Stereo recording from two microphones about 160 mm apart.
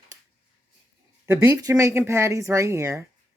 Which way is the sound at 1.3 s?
15° right (ahead or behind).